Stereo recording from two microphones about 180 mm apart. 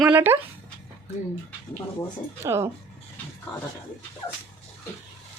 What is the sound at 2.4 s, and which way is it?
Speech, 15° right (ahead or behind).